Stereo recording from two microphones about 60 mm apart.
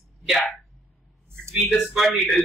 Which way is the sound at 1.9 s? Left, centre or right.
Centre.